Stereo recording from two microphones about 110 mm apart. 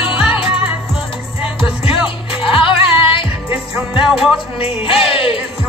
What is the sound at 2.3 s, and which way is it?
Music, 55° left (ahead or behind).